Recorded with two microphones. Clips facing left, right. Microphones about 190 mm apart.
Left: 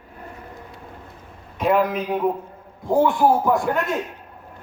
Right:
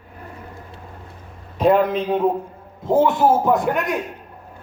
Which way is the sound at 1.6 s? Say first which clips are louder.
Right 3 dB; 30° right (ahead or behind).